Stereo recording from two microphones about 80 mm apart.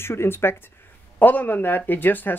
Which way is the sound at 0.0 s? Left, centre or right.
Left.